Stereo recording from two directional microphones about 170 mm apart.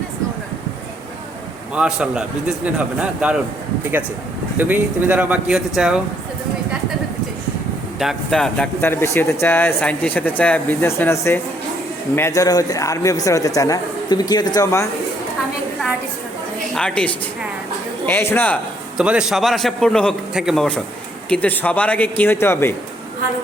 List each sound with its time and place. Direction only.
1.7 s a man's voice: 5° right (ahead or behind)
4.5 s speech: 10° right (ahead or behind)
7.9 s a man's voice: centre (ahead or behind); by 14.8 s 20° left (ahead or behind)
16.7 s a man's voice: 5° left (ahead or behind)
18.9 s a man's voice: 5° right (ahead or behind); by 22.7 s 15° left (ahead or behind)